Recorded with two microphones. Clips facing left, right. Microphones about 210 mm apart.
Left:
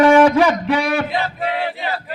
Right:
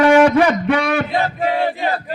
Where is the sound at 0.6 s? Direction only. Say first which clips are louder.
Right 1 dB; 55° right (ahead or behind).